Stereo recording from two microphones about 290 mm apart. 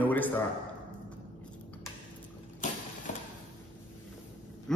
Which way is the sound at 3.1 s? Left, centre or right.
Left.